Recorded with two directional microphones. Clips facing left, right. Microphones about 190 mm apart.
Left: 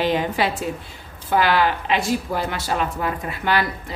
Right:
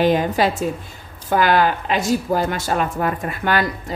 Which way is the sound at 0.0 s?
45° right (ahead or behind).